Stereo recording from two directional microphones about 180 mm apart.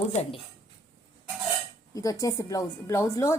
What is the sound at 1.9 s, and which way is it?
A woman's voice, 20° left (ahead or behind).